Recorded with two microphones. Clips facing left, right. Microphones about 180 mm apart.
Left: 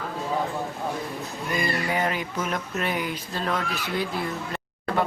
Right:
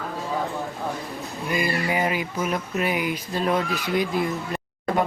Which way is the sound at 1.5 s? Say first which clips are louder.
Right 2 dB; 10° right (ahead or behind).